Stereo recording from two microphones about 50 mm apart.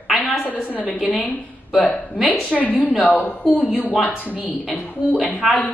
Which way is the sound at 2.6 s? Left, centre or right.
Left.